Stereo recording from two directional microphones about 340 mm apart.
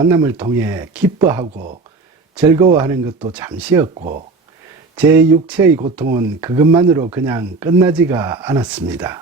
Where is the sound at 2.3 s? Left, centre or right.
Centre.